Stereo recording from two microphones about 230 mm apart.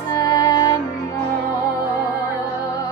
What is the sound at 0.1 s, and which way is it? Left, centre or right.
Music, centre.